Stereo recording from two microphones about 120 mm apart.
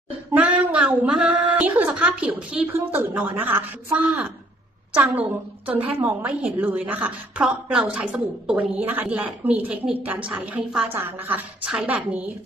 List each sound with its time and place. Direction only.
0.3 s a woman's voice: 15° right (ahead or behind)